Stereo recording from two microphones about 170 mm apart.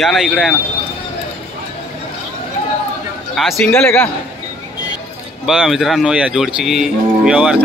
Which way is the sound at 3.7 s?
15° left (ahead or behind).